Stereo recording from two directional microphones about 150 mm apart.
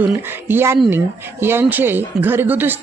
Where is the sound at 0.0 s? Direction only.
15° right (ahead or behind).